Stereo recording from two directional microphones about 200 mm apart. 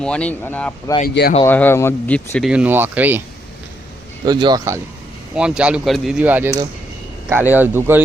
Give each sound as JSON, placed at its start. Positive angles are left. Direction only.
{"t": 0.0, "sound": "speech", "side_deg": 5}
{"t": 1.0, "sound": "speech", "side_deg": 50}
{"t": 1.5, "sound": "speech", "side_deg": 10}
{"t": 2.5, "sound": "speech", "side_deg": -5}
{"t": 4.3, "sound": "speech", "side_deg": -20}
{"t": 5.3, "sound": "speech", "side_deg": -5}
{"t": 7.5, "sound": "speech", "side_deg": -10}